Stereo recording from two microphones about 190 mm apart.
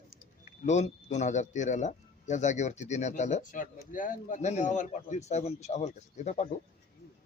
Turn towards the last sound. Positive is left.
turn(degrees=40)  # may be behind; listen again after turning